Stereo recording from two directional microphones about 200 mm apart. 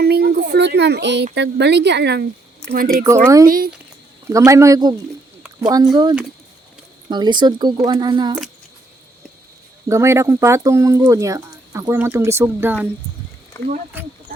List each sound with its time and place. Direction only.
0.0 s speech: 50° right (ahead or behind)
2.6 s speech: 45° right (ahead or behind)
3.0 s speech: 15° right (ahead or behind)
9.9 s speech: 15° right (ahead or behind)
13.5 s speech: 15° left (ahead or behind)